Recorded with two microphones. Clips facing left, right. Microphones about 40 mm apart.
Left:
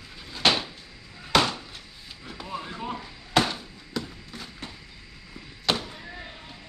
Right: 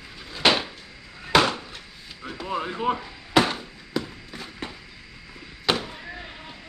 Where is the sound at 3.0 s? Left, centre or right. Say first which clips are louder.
Even; centre.